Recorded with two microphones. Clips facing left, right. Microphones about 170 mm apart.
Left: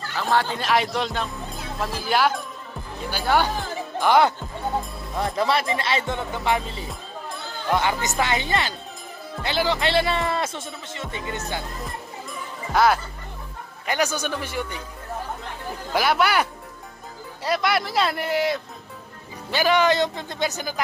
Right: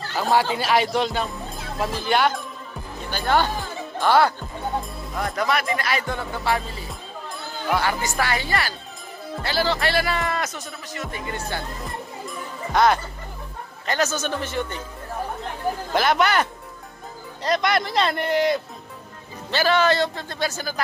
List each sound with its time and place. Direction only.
0.3 s speech: 10° right (ahead or behind); by 4.3 s 15° left (ahead or behind)
5.1 s speech: 25° left (ahead or behind)
12.7 s a man's voice: 5° left (ahead or behind)
15.9 s a man's voice: 5° left (ahead or behind)
19.5 s a man's voice: 15° left (ahead or behind)